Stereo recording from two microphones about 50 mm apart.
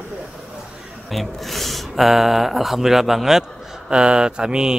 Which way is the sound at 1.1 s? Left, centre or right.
Centre.